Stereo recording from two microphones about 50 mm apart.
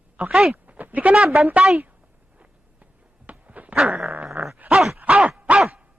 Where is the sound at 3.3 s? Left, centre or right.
Right.